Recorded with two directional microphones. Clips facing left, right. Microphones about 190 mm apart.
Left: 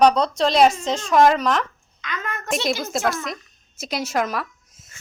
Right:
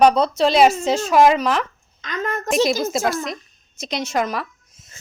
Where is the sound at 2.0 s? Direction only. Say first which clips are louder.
Right 5 dB; 40° right (ahead or behind).